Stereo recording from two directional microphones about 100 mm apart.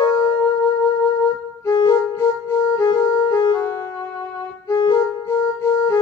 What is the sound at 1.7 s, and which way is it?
Music, 45° left (ahead or behind).